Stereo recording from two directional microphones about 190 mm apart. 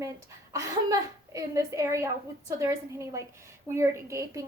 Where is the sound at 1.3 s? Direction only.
15° right (ahead or behind).